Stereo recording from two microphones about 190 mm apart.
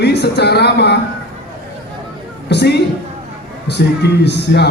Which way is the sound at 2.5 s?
60° left (ahead or behind).